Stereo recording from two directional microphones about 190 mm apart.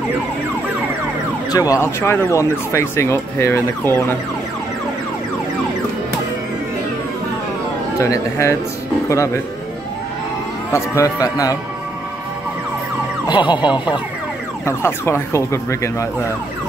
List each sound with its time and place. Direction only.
1.5 s speech: 15° left (ahead or behind)
8.0 s speech: 15° left (ahead or behind)
10.7 s speech: 15° left (ahead or behind)
13.3 s speech: 25° left (ahead or behind)
14.7 s speech: 15° left (ahead or behind)